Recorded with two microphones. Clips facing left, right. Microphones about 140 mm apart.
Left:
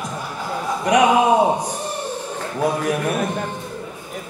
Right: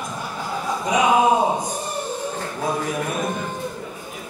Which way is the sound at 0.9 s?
70° left (ahead or behind).